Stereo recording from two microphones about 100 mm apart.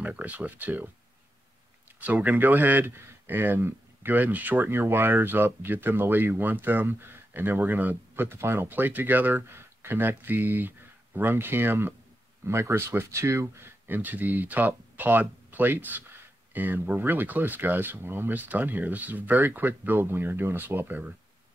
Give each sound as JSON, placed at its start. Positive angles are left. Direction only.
{"t": 0.0, "sound": "speech", "side_deg": -15}
{"t": 2.0, "sound": "speech", "side_deg": -15}